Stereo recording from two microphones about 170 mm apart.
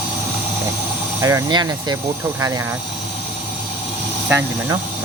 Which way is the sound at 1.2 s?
20° right (ahead or behind).